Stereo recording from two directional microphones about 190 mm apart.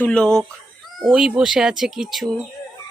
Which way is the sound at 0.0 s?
5° left (ahead or behind).